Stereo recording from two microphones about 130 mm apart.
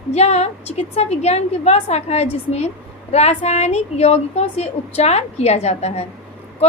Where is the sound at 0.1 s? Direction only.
55° left (ahead or behind).